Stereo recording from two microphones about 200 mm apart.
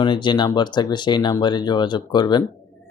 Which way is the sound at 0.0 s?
25° left (ahead or behind).